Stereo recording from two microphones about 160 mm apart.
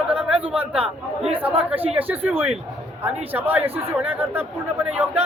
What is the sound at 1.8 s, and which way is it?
Speech, 35° right (ahead or behind).